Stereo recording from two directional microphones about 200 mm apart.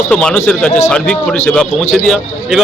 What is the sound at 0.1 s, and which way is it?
A man's voice, 5° left (ahead or behind).